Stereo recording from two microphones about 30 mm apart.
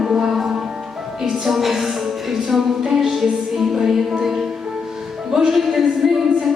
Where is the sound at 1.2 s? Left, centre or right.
Centre.